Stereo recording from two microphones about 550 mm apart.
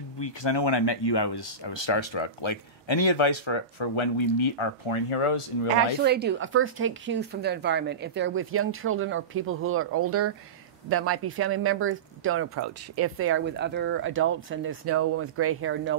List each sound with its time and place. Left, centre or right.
0.2 s speech: left
6.0 s speech: centre